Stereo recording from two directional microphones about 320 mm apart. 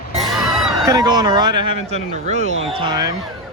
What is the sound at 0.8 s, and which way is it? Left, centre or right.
Speech, centre.